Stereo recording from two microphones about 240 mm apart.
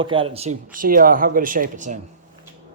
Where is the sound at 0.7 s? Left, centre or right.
Right.